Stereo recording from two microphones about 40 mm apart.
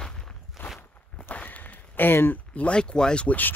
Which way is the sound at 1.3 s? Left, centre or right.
Left.